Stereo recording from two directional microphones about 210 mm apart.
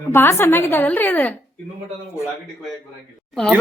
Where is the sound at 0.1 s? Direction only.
10° left (ahead or behind).